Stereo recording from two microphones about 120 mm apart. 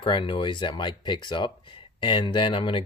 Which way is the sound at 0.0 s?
45° left (ahead or behind).